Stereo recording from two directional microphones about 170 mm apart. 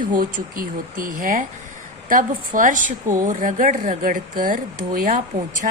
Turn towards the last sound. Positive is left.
turn(degrees=-50)  # may be behind; listen again after turning